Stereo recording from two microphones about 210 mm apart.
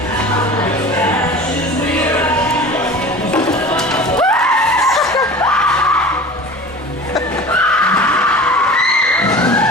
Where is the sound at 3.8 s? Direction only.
5° left (ahead or behind).